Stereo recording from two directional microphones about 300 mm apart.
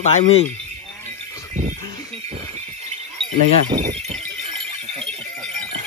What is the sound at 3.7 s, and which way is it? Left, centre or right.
Speech, right.